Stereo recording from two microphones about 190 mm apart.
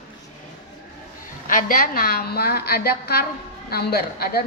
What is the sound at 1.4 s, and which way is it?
A woman's voice, 45° left (ahead or behind).